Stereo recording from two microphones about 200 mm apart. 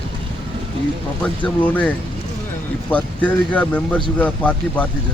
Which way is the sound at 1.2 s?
10° left (ahead or behind).